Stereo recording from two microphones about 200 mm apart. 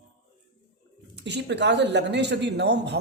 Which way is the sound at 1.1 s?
60° right (ahead or behind).